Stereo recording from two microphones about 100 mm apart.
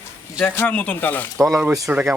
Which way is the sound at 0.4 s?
20° left (ahead or behind).